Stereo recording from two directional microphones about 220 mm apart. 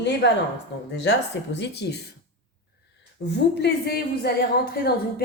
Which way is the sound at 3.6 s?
45° left (ahead or behind).